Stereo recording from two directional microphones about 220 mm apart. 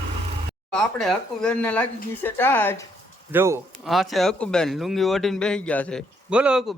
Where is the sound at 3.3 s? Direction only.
10° right (ahead or behind).